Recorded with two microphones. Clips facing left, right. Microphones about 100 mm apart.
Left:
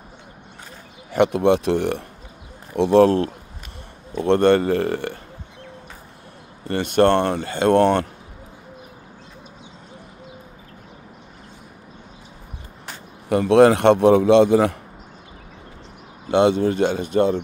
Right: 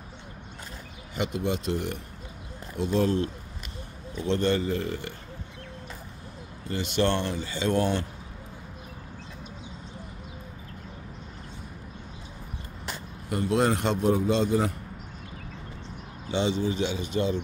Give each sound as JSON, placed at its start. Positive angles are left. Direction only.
{"t": 1.1, "sound": "speech", "side_deg": 65}
{"t": 4.2, "sound": "speech", "side_deg": 60}
{"t": 6.7, "sound": "speech", "side_deg": 55}
{"t": 13.3, "sound": "a man's voice", "side_deg": 90}
{"t": 16.3, "sound": "speech", "side_deg": 55}